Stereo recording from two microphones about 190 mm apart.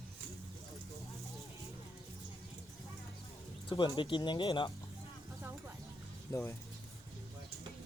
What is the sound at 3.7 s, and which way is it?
Speech, 25° left (ahead or behind).